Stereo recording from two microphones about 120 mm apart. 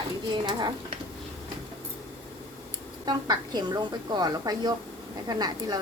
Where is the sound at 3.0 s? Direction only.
35° right (ahead or behind).